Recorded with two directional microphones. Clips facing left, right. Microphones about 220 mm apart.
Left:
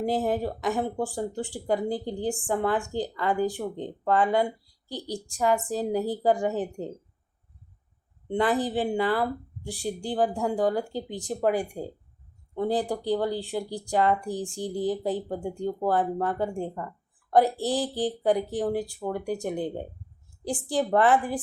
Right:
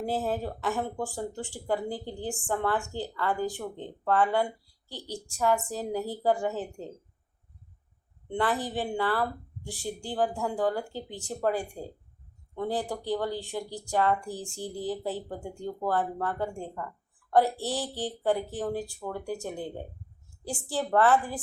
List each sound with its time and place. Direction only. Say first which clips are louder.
0.0 s speech: left 4 dB; 15° left (ahead or behind)
8.3 s speech: left 4 dB; 15° left (ahead or behind)
17.6 s speech: left 5 dB; 35° left (ahead or behind)
17.9 s speech: left 4 dB; 15° left (ahead or behind)